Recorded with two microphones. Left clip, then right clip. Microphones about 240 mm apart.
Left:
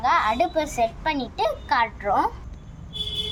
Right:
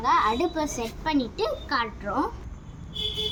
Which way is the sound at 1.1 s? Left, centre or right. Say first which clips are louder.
Left 2 dB; left.